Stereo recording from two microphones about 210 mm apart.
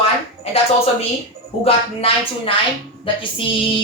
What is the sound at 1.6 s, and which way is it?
Speech, 25° left (ahead or behind).